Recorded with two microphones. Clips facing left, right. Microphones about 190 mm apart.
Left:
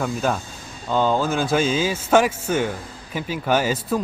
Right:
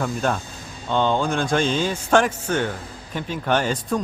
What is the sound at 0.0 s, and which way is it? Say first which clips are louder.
A man's voice: left 1 dB; 5° left (ahead or behind).